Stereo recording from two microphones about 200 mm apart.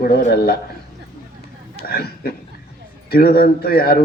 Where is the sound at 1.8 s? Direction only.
50° left (ahead or behind).